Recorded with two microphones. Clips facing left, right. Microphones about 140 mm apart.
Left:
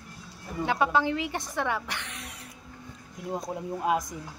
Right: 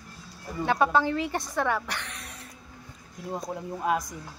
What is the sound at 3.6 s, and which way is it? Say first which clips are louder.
Speech: left 1 dB; 15° left (ahead or behind).